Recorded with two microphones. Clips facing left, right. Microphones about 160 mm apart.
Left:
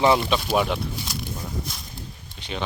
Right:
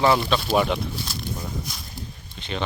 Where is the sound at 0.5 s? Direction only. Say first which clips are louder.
Right 2 dB; centre (ahead or behind).